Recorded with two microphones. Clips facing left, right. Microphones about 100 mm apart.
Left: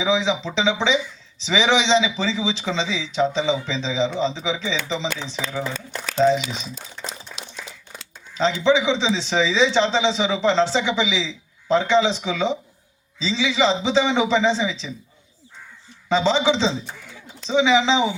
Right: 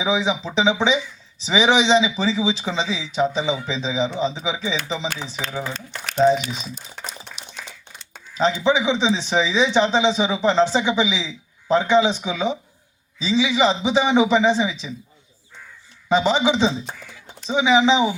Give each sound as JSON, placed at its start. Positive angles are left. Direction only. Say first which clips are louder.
{"t": 0.0, "sound": "a man's voice", "louder": "even", "side_deg": -15}
{"t": 6.3, "sound": "speech", "louder": "even", "side_deg": 25}
{"t": 7.4, "sound": "a sound", "louder": "left 3 dB", "side_deg": 90}
{"t": 8.4, "sound": "a man's voice", "louder": "even", "side_deg": -15}
{"t": 16.0, "sound": "a man's voice", "louder": "right 1 dB", "side_deg": -15}